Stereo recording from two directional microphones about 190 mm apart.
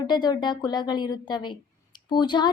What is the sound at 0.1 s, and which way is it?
A woman's voice, 20° left (ahead or behind).